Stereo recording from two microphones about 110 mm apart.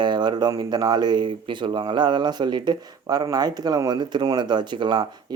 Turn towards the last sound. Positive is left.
turn(degrees=-45)  # may be behind; listen again after turning